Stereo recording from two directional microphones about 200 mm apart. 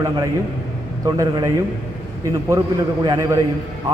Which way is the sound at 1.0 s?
20° right (ahead or behind).